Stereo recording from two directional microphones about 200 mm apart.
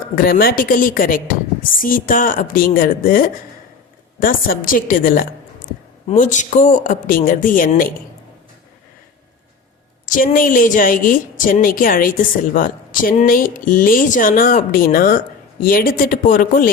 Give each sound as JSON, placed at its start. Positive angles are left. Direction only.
{"t": 0.2, "sound": "a woman's voice", "side_deg": 45}
{"t": 10.2, "sound": "a woman's voice", "side_deg": 45}